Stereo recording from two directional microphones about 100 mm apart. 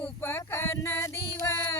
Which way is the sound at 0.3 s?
25° left (ahead or behind).